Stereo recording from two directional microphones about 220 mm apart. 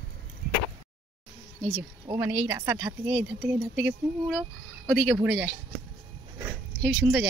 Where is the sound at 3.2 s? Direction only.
5° right (ahead or behind).